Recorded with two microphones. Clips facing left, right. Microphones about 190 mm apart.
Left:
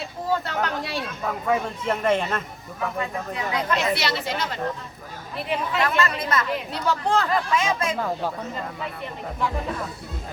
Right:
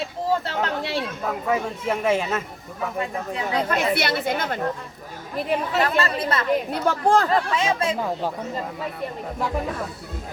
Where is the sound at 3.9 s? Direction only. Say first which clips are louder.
Right 3 dB; 55° right (ahead or behind).